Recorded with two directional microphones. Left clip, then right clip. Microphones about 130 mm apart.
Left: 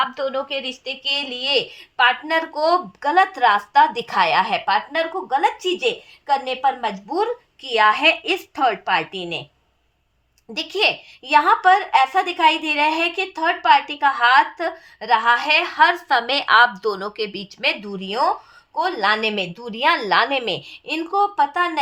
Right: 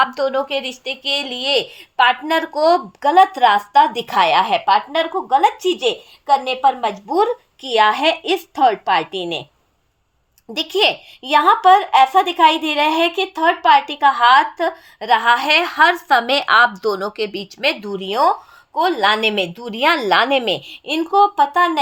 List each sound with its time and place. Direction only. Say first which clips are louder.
0.4 s a woman's voice: right 4 dB; 90° right; by 9.4 s 45° right (ahead or behind)
10.5 s a woman's voice: right 3 dB; 50° right (ahead or behind)